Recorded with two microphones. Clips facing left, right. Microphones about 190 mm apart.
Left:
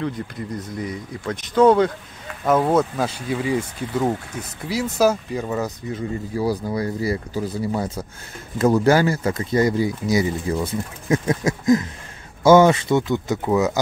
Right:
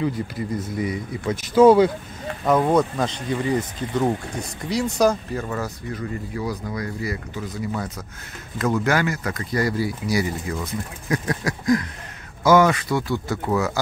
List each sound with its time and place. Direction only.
0.6 s speech: 5° right (ahead or behind)
2.4 s speech: 5° left (ahead or behind)
6.3 s speech: 30° left (ahead or behind)